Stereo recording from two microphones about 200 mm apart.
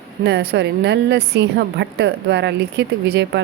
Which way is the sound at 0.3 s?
60° right (ahead or behind).